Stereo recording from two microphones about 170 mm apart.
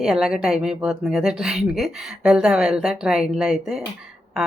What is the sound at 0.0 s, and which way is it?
Speech, 5° right (ahead or behind).